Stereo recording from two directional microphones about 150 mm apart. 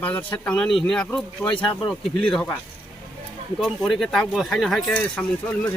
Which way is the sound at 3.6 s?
Centre (ahead or behind).